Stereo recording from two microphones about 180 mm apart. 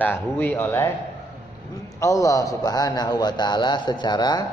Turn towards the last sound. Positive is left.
turn(degrees=25)  # may be behind; listen again after turning